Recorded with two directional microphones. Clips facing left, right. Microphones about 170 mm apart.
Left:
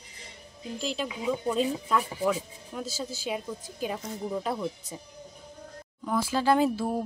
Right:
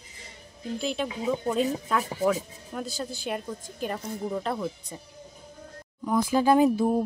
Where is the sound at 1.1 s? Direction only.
40° right (ahead or behind).